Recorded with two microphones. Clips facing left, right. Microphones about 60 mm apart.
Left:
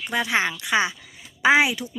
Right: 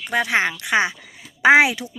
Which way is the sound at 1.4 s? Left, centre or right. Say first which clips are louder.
Right 4 dB; right.